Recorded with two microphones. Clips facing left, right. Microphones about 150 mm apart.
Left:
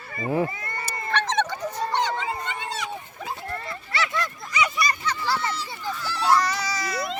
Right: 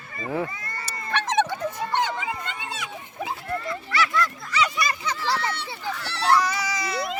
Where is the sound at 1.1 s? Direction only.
10° right (ahead or behind).